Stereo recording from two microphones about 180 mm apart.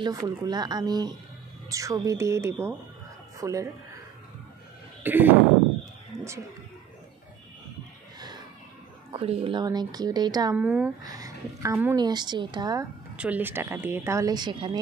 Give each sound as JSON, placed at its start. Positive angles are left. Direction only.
{"t": 0.0, "sound": "a woman's voice", "side_deg": -20}
{"t": 5.0, "sound": "speech", "side_deg": -10}
{"t": 9.1, "sound": "a woman's voice", "side_deg": -30}
{"t": 10.5, "sound": "speech", "side_deg": -10}
{"t": 11.1, "sound": "a woman's voice", "side_deg": -20}
{"t": 13.1, "sound": "speech", "side_deg": -5}